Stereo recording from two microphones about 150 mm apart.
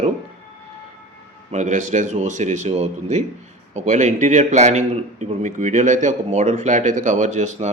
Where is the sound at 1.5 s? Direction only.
55° right (ahead or behind).